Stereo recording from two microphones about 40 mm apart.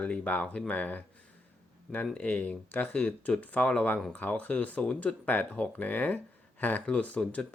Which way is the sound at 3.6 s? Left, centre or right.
Left.